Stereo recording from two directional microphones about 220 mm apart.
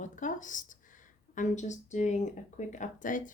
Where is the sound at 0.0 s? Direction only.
35° left (ahead or behind).